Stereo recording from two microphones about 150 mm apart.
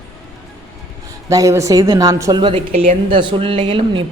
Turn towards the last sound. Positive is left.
turn(degrees=-35)  # may be behind; listen again after turning